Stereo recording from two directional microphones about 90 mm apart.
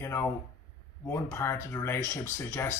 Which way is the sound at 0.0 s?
30° left (ahead or behind).